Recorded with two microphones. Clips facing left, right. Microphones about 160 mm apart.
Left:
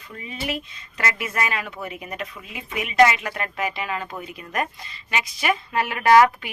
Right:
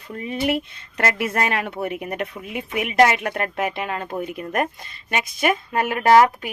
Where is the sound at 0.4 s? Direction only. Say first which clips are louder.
Right 6 dB; 60° right (ahead or behind).